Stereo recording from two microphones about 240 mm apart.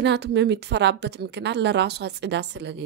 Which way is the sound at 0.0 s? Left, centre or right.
Right.